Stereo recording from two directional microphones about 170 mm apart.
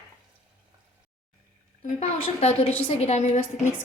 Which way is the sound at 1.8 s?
40° left (ahead or behind).